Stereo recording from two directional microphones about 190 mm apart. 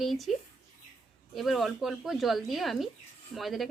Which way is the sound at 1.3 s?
Centre (ahead or behind).